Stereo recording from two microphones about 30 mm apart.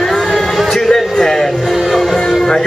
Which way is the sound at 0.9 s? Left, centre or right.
Centre.